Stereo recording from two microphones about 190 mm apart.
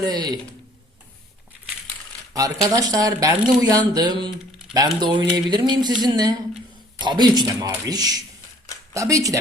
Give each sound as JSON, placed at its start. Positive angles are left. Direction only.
{"t": 0.0, "sound": "speech", "side_deg": -20}
{"t": 2.3, "sound": "speech", "side_deg": -20}